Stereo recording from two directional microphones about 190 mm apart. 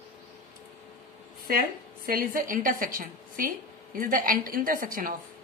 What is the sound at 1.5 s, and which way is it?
A woman's voice, 50° right (ahead or behind).